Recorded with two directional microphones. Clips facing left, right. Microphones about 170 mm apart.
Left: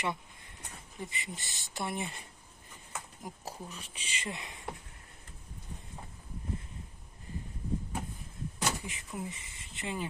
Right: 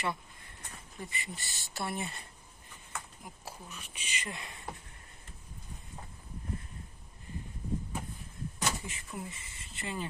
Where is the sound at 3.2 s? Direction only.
35° left (ahead or behind); by 4.6 s 20° left (ahead or behind).